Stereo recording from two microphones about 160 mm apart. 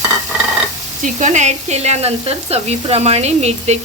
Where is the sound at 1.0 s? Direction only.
50° right (ahead or behind).